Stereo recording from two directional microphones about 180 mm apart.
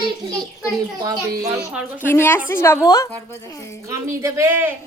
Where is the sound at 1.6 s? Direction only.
5° right (ahead or behind).